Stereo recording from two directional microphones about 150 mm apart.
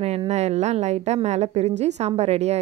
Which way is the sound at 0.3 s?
45° right (ahead or behind).